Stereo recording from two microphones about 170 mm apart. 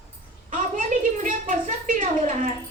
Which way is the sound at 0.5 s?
45° right (ahead or behind).